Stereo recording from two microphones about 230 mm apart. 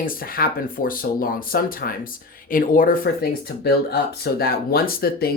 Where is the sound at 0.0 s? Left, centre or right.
Left.